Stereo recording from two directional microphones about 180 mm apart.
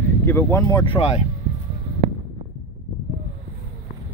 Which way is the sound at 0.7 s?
25° left (ahead or behind).